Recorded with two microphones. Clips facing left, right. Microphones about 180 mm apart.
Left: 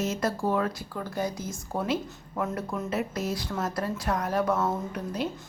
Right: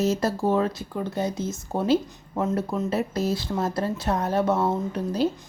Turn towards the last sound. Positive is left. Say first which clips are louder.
# right 7 dB
turn(degrees=-30)  # may be behind; listen again after turning